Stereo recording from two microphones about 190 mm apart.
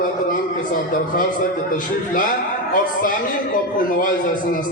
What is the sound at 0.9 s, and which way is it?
A man's voice, 45° left (ahead or behind).